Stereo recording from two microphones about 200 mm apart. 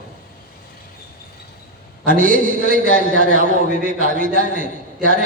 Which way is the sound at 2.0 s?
40° right (ahead or behind).